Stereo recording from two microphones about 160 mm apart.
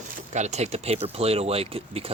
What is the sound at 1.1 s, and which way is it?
Speech, 40° right (ahead or behind).